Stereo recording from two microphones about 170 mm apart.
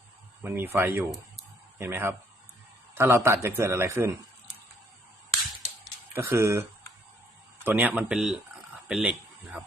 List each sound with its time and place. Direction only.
0.4 s a man's voice: 10° right (ahead or behind)
6.1 s a man's voice: 15° right (ahead or behind)